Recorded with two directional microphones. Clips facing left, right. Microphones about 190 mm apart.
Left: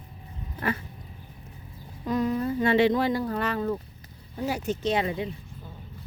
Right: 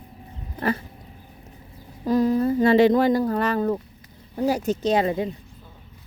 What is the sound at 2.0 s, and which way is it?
Speech, 35° right (ahead or behind).